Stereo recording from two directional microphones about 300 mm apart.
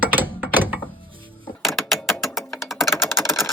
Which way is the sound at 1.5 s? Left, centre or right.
Centre.